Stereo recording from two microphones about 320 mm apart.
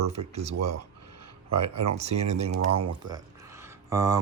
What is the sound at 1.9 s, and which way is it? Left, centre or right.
Speech, centre.